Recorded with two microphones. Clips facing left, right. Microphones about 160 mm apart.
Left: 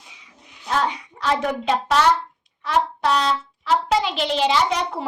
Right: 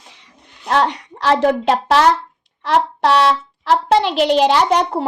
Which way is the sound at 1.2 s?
75° right (ahead or behind).